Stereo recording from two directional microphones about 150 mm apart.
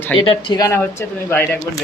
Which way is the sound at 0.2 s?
35° left (ahead or behind).